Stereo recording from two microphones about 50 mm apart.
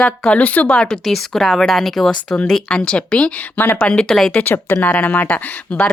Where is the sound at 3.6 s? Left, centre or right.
Left.